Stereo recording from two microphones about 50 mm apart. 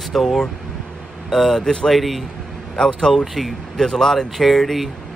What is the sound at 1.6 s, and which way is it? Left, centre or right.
Speech, centre.